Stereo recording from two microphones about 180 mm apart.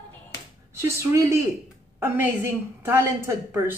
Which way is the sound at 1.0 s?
15° right (ahead or behind).